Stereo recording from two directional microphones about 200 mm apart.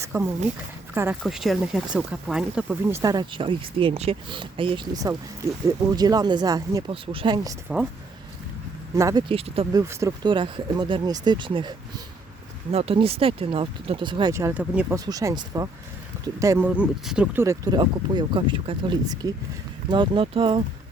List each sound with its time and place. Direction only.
0.0 s a sound: 10° right (ahead or behind)
1.2 s speech: centre (ahead or behind); by 7.5 s 25° right (ahead or behind)
9.0 s speech: 15° right (ahead or behind)
9.3 s speech: 30° right (ahead or behind)
9.7 s speech: 15° right (ahead or behind)
12.7 s speech: 30° right (ahead or behind); by 14.9 s 5° right (ahead or behind)
14.9 s speech: 15° right (ahead or behind)